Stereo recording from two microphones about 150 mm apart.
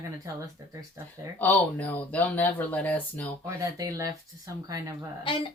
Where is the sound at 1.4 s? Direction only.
10° left (ahead or behind).